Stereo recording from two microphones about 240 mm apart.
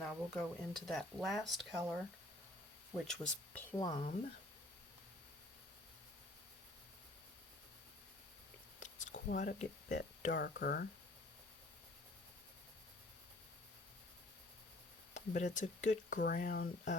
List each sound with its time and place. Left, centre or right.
0.0 s speech: centre
3.0 s speech: centre
3.8 s speech: centre
9.3 s speech: left
10.3 s speech: left
15.1 s speech: left